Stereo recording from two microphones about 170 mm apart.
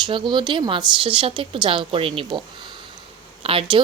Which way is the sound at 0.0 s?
25° right (ahead or behind).